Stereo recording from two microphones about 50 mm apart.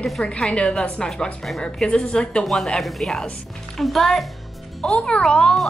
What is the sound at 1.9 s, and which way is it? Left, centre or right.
Speech, left.